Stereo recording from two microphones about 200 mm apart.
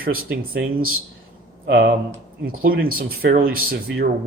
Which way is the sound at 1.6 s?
50° right (ahead or behind).